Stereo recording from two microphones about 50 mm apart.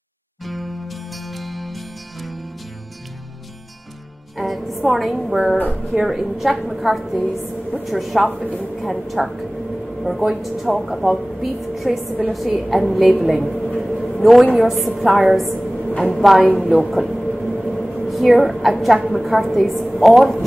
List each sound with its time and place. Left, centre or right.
0.5 s music: centre
4.4 s a woman's voice: centre
7.2 s a woman's voice: left
7.8 s a woman's voice: centre
13.7 s a sound: centre
15.0 s a woman's voice: centre
16.8 s a sound: centre
18.0 s a woman's voice: centre